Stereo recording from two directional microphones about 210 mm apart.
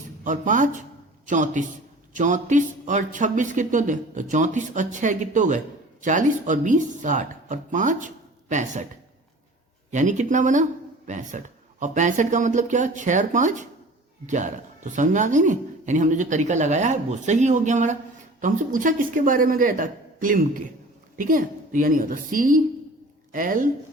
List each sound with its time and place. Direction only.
0.3 s speech: 35° right (ahead or behind)
9.9 s speech: 35° right (ahead or behind)